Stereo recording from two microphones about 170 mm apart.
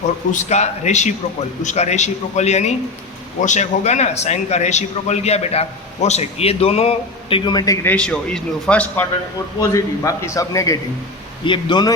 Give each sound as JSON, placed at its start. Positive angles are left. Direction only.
{"t": 0.3, "sound": "a man's voice", "side_deg": 45}
{"t": 7.9, "sound": "a man's voice", "side_deg": 5}
{"t": 9.6, "sound": "a man's voice", "side_deg": 20}